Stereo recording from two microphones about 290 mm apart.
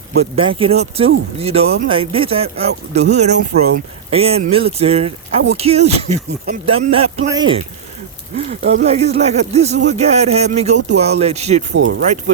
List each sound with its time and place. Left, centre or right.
0.2 s speech: centre
4.1 s speech: right
11.7 s speech: right